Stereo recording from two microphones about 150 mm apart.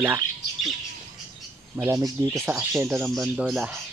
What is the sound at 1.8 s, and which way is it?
Speech, 20° right (ahead or behind).